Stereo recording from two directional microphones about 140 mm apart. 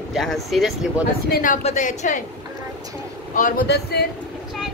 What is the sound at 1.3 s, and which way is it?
Speech, 85° left.